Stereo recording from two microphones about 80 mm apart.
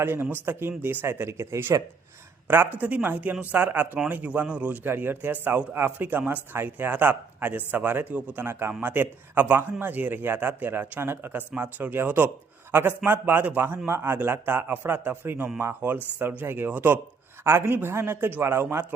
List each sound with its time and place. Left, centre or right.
0.0 s a man's voice: right
2.7 s a man's voice: right